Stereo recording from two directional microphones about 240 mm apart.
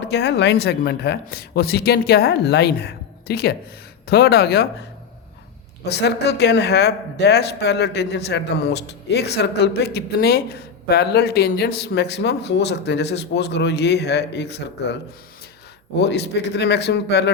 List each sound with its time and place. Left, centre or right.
0.0 s a man's voice: left
5.8 s a man's voice: left
16.0 s a man's voice: left